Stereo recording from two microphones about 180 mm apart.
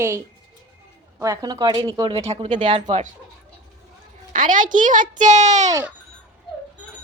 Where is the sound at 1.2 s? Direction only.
20° right (ahead or behind).